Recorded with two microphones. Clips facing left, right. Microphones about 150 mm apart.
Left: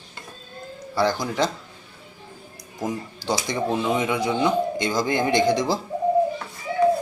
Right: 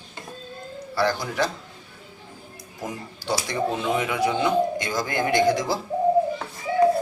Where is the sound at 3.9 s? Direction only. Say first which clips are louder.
Left 1 dB; 20° left (ahead or behind).